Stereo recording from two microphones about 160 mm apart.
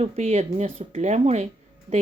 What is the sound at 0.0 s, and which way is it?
Speech, 40° right (ahead or behind).